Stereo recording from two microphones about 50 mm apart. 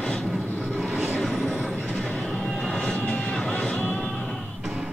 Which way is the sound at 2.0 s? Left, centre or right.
Centre.